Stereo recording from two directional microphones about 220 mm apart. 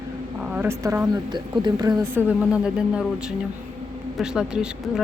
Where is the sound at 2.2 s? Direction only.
10° right (ahead or behind).